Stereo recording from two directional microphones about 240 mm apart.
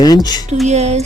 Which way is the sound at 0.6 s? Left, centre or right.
Right.